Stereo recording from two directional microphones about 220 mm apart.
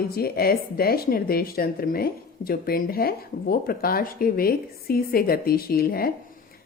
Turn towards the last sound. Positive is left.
turn(degrees=40)  # may be behind; listen again after turning